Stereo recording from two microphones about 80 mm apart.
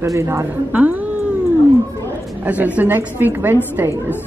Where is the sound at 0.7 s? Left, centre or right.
Centre.